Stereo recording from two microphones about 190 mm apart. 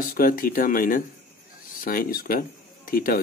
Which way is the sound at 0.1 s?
50° left (ahead or behind).